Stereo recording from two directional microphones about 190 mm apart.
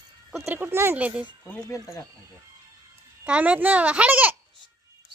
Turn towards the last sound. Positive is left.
turn(degrees=-10)  # may be behind; listen again after turning